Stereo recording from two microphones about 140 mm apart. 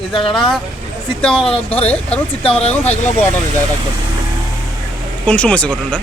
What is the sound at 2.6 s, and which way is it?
Speech, 50° left (ahead or behind).